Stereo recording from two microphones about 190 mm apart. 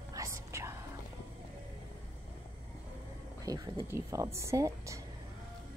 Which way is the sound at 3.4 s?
20° right (ahead or behind).